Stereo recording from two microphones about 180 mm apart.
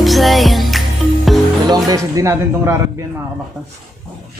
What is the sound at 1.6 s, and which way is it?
Music, 20° right (ahead or behind).